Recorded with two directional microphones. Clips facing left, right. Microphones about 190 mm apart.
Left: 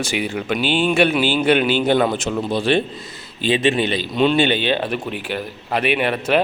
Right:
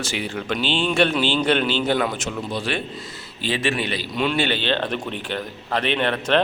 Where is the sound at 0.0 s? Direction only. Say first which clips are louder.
Left 4 dB; 15° left (ahead or behind).